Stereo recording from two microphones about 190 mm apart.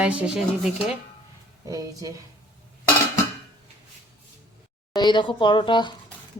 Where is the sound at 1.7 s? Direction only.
20° right (ahead or behind).